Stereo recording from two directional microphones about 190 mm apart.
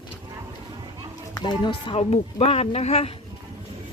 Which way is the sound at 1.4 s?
25° left (ahead or behind).